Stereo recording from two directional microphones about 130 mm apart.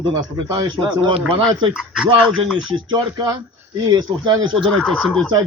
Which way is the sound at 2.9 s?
35° right (ahead or behind).